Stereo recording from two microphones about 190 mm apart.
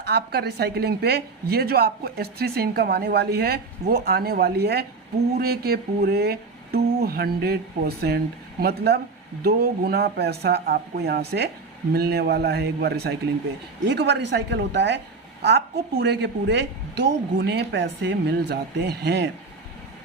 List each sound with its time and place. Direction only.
0.0 s a woman's voice: 60° right (ahead or behind)